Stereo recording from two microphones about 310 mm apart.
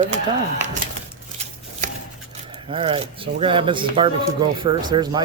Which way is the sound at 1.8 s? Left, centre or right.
Right.